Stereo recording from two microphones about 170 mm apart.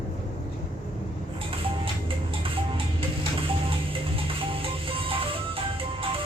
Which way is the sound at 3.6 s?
30° right (ahead or behind).